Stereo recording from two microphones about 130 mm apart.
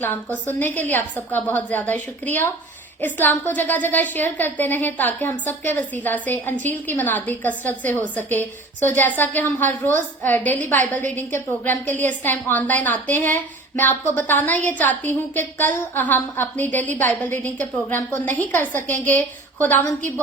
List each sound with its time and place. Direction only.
0.0 s a woman's voice: 15° left (ahead or behind)